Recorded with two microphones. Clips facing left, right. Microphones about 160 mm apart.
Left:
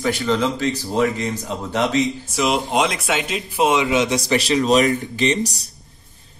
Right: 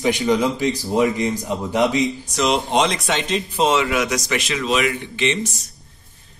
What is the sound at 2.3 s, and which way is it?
Speech, 5° left (ahead or behind).